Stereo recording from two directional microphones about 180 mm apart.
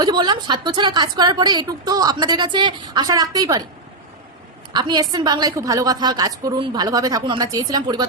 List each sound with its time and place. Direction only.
0.0 s a woman's voice: 25° right (ahead or behind)
4.7 s a woman's voice: 25° right (ahead or behind)